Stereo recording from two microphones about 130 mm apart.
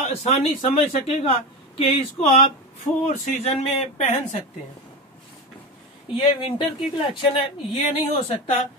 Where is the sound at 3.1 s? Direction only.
65° left (ahead or behind).